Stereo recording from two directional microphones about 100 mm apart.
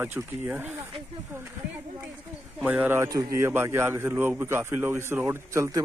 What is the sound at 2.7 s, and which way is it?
Speech, 20° right (ahead or behind).